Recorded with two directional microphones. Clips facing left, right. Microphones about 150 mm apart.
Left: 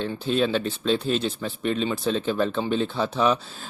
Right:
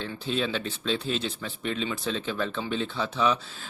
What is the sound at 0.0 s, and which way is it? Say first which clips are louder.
A man's voice: left 6 dB; 50° left (ahead or behind).